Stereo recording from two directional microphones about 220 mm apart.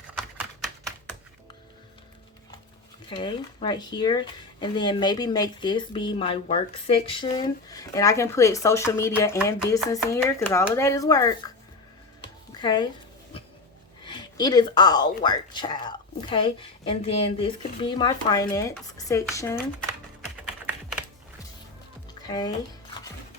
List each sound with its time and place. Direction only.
3.1 s speech: 20° left (ahead or behind)
12.2 s a sound: 20° left (ahead or behind)
14.0 s speech: 20° left (ahead or behind)
22.2 s speech: 20° left (ahead or behind)